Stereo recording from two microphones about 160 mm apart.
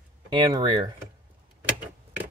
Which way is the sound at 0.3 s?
30° right (ahead or behind).